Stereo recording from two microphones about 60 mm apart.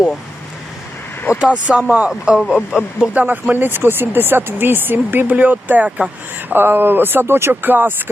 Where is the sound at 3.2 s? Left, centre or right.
Right.